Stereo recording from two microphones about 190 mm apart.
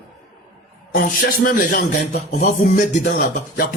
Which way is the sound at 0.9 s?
45° left (ahead or behind).